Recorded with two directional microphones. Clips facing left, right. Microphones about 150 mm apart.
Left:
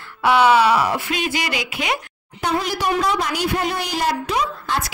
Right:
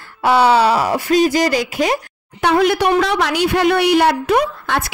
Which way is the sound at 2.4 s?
70° right (ahead or behind).